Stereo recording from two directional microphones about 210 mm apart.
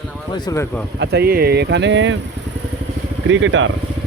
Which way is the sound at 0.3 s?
15° left (ahead or behind).